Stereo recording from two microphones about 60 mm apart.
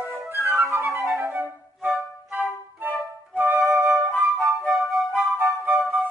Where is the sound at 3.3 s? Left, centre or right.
Right.